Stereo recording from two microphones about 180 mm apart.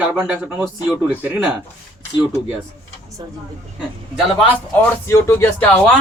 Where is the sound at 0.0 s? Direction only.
10° right (ahead or behind).